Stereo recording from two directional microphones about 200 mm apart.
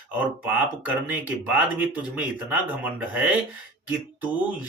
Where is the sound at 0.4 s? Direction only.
5° right (ahead or behind).